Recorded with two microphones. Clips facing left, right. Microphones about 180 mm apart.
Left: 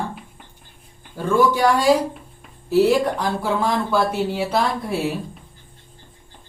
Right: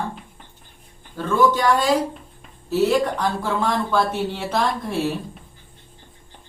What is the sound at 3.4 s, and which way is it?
Speech, 10° left (ahead or behind).